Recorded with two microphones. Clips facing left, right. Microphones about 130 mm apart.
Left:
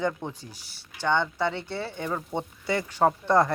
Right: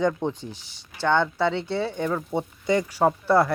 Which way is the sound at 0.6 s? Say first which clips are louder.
Right 3 dB; 10° left (ahead or behind).